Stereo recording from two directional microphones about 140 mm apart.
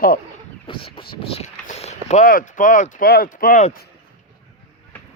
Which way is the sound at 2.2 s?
75° left (ahead or behind).